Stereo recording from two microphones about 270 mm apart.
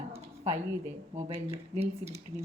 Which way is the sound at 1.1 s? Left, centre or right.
Right.